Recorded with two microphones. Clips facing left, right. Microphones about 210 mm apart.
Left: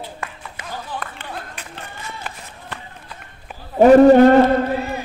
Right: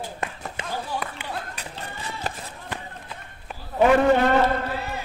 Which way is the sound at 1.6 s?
40° right (ahead or behind).